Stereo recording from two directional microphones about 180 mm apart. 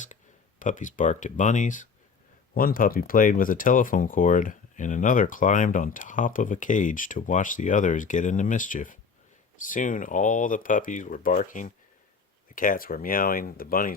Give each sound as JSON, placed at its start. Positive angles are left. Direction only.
{"t": 0.6, "sound": "speech", "side_deg": 45}